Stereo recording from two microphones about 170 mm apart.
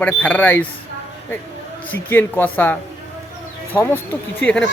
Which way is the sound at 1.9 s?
10° left (ahead or behind).